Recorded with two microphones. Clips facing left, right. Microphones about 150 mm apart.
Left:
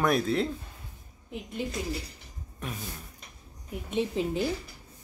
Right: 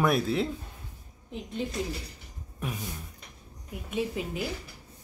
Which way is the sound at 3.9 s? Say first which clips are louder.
Left 3 dB; 25° left (ahead or behind).